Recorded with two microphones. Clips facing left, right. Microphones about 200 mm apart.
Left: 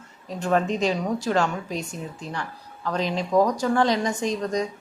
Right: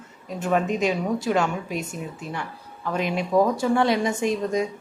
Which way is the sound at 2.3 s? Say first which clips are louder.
Even; 20° right (ahead or behind).